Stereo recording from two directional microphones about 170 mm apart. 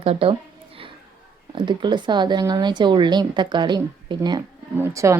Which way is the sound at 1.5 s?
30° right (ahead or behind).